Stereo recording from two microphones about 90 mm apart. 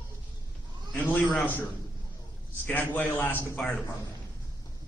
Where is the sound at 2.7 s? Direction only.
20° left (ahead or behind).